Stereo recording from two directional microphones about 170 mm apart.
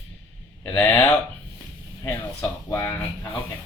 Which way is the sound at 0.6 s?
10° left (ahead or behind).